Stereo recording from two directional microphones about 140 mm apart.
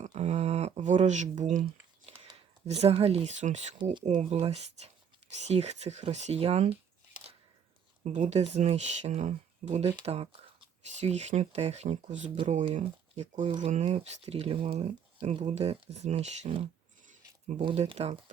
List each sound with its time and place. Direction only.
0.0 s a sound: 55° right (ahead or behind)
2.6 s speech: 45° right (ahead or behind)
8.0 s speech: 55° right (ahead or behind)
17.8 s speech: 50° right (ahead or behind)